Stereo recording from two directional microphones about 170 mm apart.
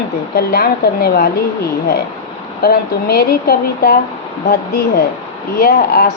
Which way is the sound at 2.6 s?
60° left (ahead or behind).